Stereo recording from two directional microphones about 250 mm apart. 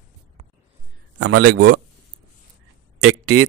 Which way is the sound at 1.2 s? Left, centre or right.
Right.